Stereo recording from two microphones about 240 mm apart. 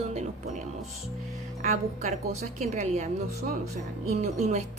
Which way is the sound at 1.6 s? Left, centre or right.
Right.